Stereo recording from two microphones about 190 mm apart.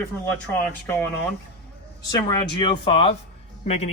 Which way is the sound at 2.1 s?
20° left (ahead or behind).